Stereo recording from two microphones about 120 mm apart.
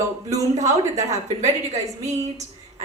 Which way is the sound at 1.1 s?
70° right (ahead or behind).